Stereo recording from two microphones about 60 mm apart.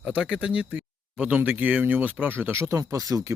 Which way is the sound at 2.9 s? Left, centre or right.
Right.